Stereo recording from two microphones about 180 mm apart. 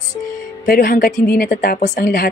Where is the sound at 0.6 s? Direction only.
55° left (ahead or behind).